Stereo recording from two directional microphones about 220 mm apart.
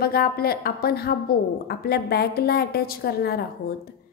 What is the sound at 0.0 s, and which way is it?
A woman's voice, 45° left (ahead or behind).